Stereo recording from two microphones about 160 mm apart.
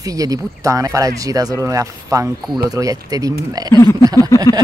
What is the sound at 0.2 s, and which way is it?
Speech, 20° right (ahead or behind).